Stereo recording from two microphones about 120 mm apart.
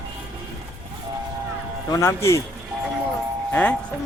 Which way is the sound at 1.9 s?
25° left (ahead or behind).